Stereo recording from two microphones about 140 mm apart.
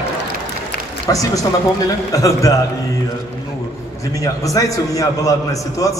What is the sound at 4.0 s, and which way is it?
A man's voice, 25° left (ahead or behind).